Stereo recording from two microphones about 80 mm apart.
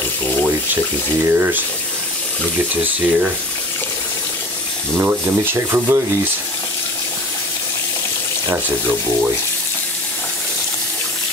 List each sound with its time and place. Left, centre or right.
1.2 s speech: right
2.7 s speech: right
4.9 s speech: right
8.5 s speech: right